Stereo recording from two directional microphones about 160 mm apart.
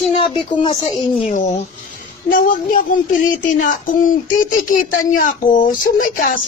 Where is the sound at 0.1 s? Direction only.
30° left (ahead or behind).